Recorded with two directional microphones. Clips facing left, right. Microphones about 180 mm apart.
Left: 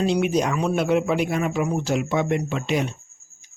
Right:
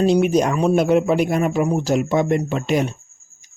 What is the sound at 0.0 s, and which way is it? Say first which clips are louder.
Speech: right 5 dB; 40° right (ahead or behind).